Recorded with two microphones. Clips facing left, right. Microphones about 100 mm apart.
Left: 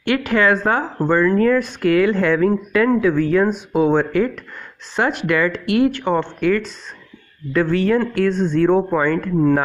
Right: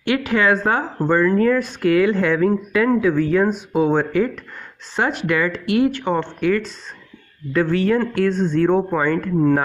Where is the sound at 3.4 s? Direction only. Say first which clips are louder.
Left 1 dB; 40° right (ahead or behind).